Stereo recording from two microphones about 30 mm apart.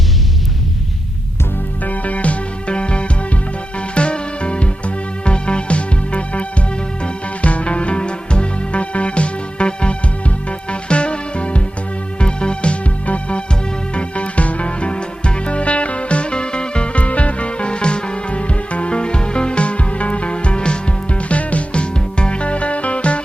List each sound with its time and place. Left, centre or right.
1.8 s music: left
13.9 s music: left